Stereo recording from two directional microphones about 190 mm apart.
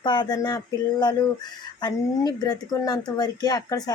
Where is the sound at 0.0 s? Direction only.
25° left (ahead or behind).